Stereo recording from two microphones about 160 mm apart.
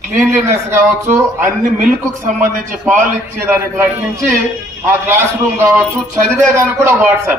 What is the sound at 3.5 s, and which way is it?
Speech, 15° right (ahead or behind).